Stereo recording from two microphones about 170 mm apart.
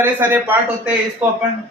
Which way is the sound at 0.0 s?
10° right (ahead or behind).